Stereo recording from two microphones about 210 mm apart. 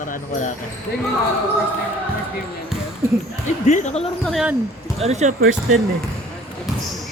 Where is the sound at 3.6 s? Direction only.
35° left (ahead or behind).